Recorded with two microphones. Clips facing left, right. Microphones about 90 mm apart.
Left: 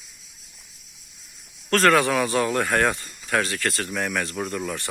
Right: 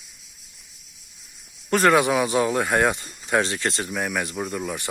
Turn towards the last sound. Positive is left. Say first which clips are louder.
# even
turn(degrees=-10)  # may be behind; listen again after turning